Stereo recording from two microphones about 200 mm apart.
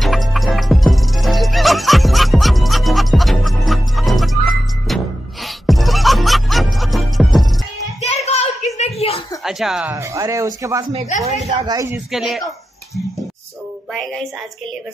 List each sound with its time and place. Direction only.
0.0 s turkey: centre (ahead or behind)
8.3 s a sound: 35° left (ahead or behind)
9.4 s speech: centre (ahead or behind)
9.9 s speech: 15° right (ahead or behind)
11.2 s speech: 35° right (ahead or behind)
11.6 s speech: 15° right (ahead or behind)
12.1 s speech: centre (ahead or behind)
13.9 s speech: 5° left (ahead or behind)